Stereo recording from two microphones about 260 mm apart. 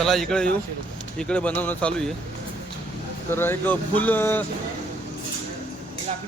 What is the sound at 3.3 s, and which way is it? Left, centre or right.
A man's voice, centre.